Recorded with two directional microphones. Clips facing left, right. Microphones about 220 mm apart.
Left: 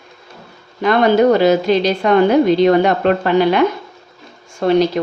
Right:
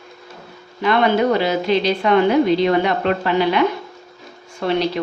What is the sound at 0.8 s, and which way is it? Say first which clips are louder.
A woman's voice: left 4 dB; 45° left (ahead or behind).